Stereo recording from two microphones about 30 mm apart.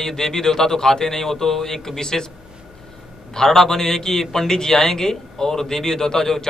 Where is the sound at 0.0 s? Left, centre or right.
Centre.